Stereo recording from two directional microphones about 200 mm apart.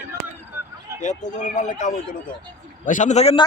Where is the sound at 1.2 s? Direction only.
35° left (ahead or behind).